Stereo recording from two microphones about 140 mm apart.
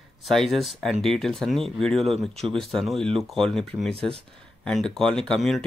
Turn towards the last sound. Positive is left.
turn(degrees=5)  # may be behind; listen again after turning